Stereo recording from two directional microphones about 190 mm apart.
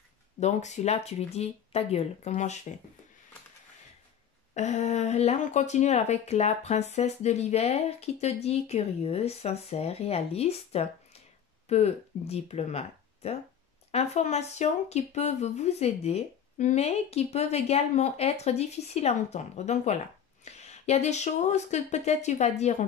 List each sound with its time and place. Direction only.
0.4 s speech: 35° left (ahead or behind)
4.6 s speech: 40° left (ahead or behind)